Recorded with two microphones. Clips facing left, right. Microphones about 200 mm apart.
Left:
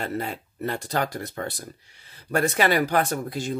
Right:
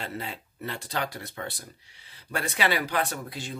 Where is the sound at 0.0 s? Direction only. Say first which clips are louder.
Left 6 dB; 50° left (ahead or behind).